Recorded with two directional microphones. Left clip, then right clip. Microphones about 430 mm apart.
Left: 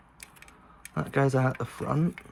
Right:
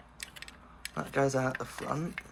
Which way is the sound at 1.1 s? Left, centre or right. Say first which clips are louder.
Left 3 dB; centre.